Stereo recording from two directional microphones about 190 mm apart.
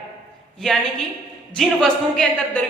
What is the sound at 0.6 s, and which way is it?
A woman's voice, centre (ahead or behind).